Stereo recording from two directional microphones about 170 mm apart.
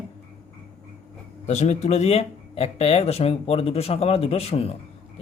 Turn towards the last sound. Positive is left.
turn(degrees=35)  # may be behind; listen again after turning